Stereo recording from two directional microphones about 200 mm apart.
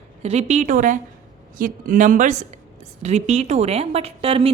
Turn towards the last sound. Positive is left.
turn(degrees=-30)  # may be behind; listen again after turning